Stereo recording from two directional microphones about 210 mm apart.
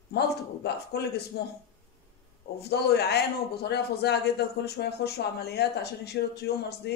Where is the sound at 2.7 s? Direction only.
50° left (ahead or behind).